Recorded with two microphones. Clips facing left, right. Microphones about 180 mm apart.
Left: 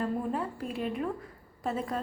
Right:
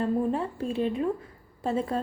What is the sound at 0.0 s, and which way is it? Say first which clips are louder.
A woman's voice: right 5 dB; 25° right (ahead or behind).